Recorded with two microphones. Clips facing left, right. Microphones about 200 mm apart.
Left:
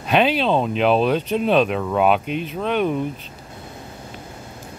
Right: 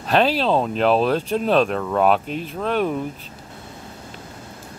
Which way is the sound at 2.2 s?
35° right (ahead or behind).